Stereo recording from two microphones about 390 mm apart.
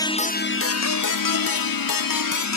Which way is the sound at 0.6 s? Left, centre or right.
Left.